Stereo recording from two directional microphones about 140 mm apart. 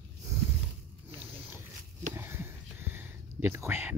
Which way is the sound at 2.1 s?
15° right (ahead or behind).